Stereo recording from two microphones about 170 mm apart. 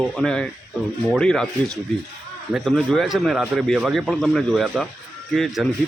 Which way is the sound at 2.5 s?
5° right (ahead or behind).